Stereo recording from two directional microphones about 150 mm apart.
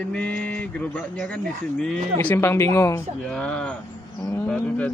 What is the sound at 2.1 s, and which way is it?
Speech, 15° left (ahead or behind).